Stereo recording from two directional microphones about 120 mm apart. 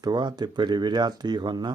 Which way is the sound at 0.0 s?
35° right (ahead or behind).